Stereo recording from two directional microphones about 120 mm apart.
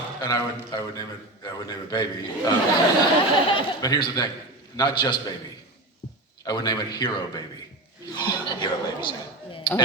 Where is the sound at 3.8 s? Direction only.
30° left (ahead or behind).